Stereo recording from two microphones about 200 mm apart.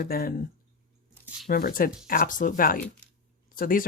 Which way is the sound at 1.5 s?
45° left (ahead or behind).